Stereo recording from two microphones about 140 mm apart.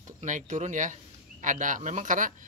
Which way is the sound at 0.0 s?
60° right (ahead or behind).